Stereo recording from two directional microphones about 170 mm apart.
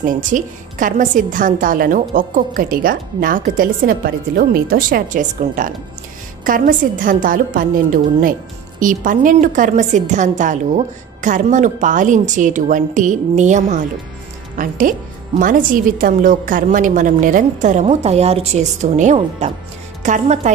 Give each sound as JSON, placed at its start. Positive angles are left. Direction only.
{"t": 0.0, "sound": "a woman's voice", "side_deg": -50}